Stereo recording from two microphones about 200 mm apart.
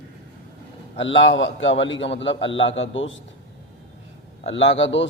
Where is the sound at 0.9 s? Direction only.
65° left (ahead or behind).